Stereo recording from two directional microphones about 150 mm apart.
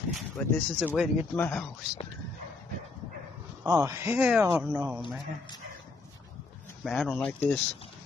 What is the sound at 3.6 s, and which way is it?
Speech, 20° right (ahead or behind).